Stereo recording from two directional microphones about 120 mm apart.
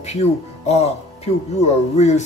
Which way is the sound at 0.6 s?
65° left (ahead or behind).